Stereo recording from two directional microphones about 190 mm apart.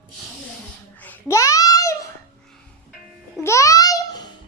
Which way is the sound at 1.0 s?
15° left (ahead or behind).